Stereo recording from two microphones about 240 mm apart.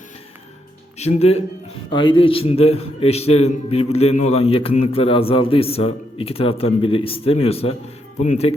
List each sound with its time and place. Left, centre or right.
0.9 s a man's voice: left